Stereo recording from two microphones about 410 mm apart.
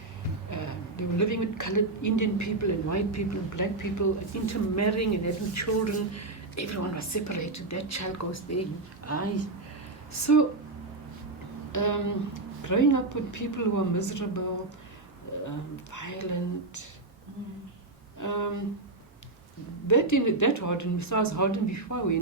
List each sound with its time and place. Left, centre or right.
0.5 s a woman's voice: left
11.7 s a woman's voice: left
15.4 s a woman's voice: left
18.2 s a woman's voice: left
19.9 s a woman's voice: left